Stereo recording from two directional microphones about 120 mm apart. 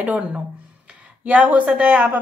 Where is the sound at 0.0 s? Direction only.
10° right (ahead or behind).